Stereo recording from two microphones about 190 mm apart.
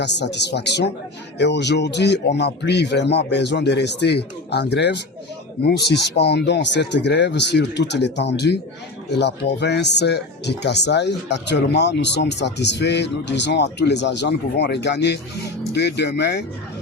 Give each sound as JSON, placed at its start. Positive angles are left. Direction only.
{"t": 0.0, "sound": "speech", "side_deg": 65}